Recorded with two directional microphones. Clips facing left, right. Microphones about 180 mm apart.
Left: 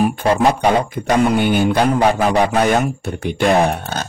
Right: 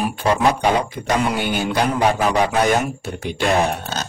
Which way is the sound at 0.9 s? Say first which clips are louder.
Left 5 dB; 55° left (ahead or behind).